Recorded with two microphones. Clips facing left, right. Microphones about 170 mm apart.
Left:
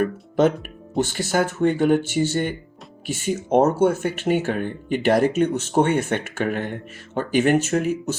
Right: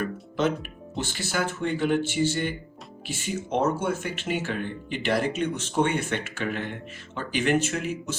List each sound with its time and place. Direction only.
0.0 s speech: 50° left (ahead or behind)